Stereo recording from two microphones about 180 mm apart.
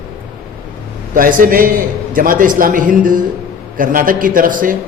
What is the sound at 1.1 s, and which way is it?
A man's voice, 50° right (ahead or behind).